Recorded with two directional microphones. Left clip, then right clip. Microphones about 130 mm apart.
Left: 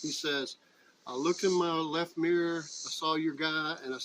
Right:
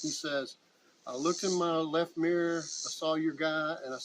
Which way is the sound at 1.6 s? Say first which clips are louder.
Right 1 dB; 30° right (ahead or behind).